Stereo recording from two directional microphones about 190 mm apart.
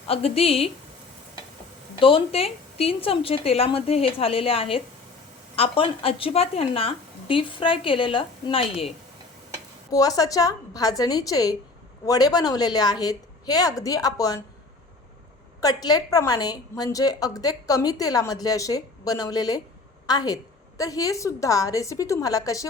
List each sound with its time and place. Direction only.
0.1 s a woman's voice: 30° left (ahead or behind)
2.0 s a woman's voice: 30° left (ahead or behind)
9.9 s a woman's voice: 20° left (ahead or behind)
15.6 s a woman's voice: 20° left (ahead or behind)